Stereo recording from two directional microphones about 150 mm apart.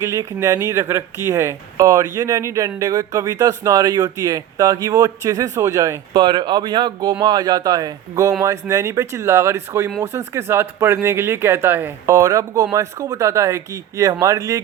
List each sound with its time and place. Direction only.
0.0 s speech: 20° right (ahead or behind)